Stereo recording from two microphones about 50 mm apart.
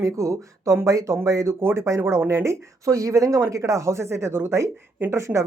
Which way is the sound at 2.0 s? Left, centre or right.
Right.